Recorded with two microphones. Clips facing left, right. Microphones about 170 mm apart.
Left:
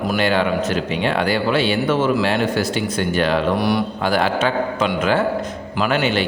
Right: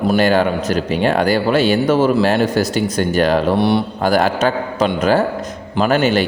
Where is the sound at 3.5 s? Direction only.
25° right (ahead or behind).